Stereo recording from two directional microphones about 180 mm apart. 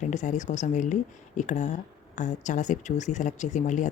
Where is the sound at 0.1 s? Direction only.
40° left (ahead or behind).